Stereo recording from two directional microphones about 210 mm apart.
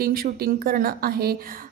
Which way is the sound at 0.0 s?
45° right (ahead or behind).